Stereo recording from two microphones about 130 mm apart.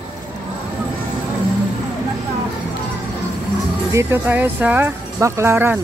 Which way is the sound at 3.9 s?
15° right (ahead or behind).